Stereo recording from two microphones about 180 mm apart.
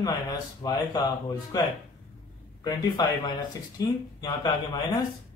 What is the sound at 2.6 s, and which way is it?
Speech, 25° left (ahead or behind).